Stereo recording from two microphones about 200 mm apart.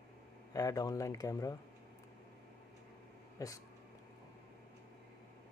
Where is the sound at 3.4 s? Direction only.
15° left (ahead or behind).